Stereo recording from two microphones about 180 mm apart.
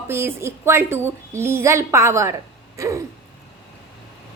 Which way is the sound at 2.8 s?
15° right (ahead or behind).